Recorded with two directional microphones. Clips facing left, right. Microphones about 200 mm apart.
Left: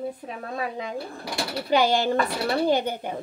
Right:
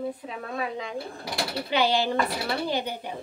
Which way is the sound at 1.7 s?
45° left (ahead or behind).